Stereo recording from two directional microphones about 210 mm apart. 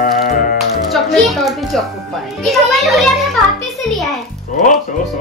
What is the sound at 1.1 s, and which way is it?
Speech, centre (ahead or behind).